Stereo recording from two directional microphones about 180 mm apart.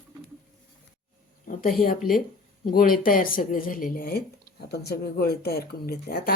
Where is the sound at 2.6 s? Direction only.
55° left (ahead or behind).